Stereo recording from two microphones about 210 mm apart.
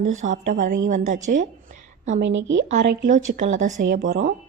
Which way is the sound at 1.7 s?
35° right (ahead or behind).